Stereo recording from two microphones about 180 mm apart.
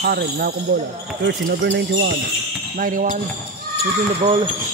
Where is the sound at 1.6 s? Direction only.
90° right.